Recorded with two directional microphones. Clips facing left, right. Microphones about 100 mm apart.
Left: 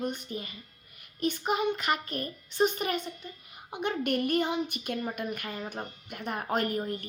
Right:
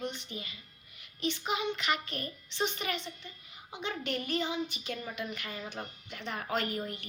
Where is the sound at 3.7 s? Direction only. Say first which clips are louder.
Left 6 dB; 55° left (ahead or behind).